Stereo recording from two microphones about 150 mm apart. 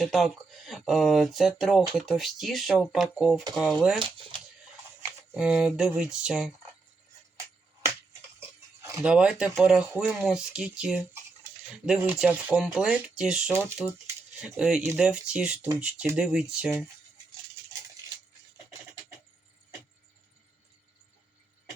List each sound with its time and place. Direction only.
0.0 s speech: centre (ahead or behind)
5.3 s speech: 5° right (ahead or behind)
8.4 s a sound: 20° right (ahead or behind)
9.0 s speech: 5° right (ahead or behind)